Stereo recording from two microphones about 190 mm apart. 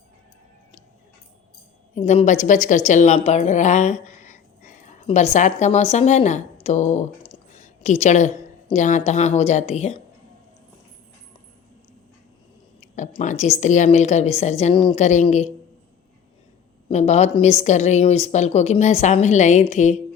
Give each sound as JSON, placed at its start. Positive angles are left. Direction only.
{"t": 2.0, "sound": "a woman's voice", "side_deg": 35}
{"t": 13.0, "sound": "a woman's voice", "side_deg": 40}
{"t": 16.9, "sound": "a woman's voice", "side_deg": 35}